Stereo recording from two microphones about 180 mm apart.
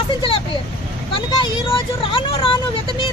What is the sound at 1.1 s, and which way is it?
Speech, 30° left (ahead or behind).